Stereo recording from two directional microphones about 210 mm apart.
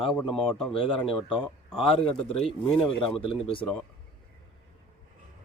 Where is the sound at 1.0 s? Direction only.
Centre (ahead or behind).